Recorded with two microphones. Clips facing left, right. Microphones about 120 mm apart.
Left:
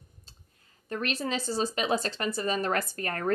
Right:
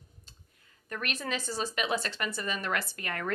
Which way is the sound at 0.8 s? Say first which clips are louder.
Left 4 dB; 30° left (ahead or behind).